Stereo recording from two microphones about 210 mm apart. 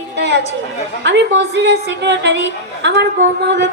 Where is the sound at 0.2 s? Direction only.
55° right (ahead or behind).